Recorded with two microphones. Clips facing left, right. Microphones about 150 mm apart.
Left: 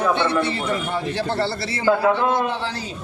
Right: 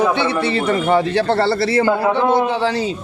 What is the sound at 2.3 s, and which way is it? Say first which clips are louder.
Speech: right 7 dB; 90° right.